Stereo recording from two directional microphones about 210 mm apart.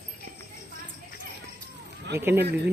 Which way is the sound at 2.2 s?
10° right (ahead or behind).